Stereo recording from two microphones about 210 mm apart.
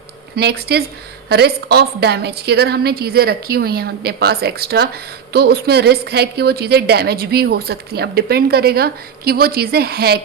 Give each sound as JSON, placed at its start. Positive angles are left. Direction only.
{"t": 0.3, "sound": "a woman's voice", "side_deg": -50}